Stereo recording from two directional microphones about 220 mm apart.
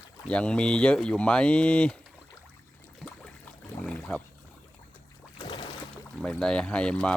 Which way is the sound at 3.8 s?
5° left (ahead or behind).